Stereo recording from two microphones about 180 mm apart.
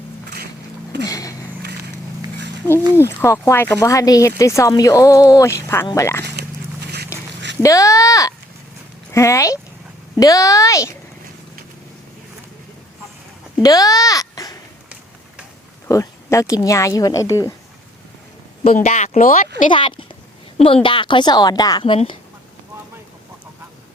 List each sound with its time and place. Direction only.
1.0 s a sound: 20° left (ahead or behind)
2.9 s speech: 15° left (ahead or behind)
6.8 s a sound: 65° right (ahead or behind)
7.6 s speech: 20° left (ahead or behind)
13.6 s babbling: 20° left (ahead or behind)
15.9 s speech: 15° left (ahead or behind)
18.8 s speech: 40° left (ahead or behind)
19.7 s speech: 30° left (ahead or behind)